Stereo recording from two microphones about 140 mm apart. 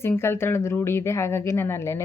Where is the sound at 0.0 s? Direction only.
15° left (ahead or behind).